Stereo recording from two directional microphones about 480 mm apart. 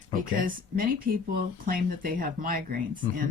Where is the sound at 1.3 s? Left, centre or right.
Centre.